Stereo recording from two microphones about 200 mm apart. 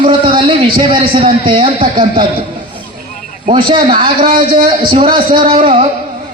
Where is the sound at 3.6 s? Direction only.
25° right (ahead or behind).